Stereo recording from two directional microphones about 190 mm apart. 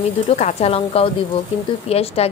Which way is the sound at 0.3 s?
35° left (ahead or behind).